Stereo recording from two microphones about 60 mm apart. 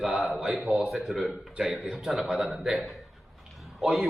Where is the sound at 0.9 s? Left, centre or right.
Centre.